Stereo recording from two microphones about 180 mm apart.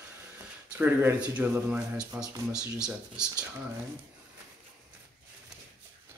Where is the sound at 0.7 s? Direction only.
10° right (ahead or behind).